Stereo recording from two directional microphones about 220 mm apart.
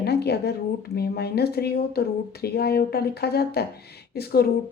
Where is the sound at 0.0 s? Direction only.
45° left (ahead or behind).